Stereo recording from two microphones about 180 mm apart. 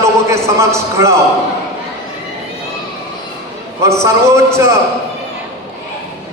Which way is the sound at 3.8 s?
15° right (ahead or behind).